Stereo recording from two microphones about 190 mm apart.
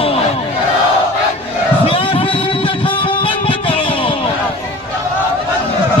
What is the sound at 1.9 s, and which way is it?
Music, 30° left (ahead or behind).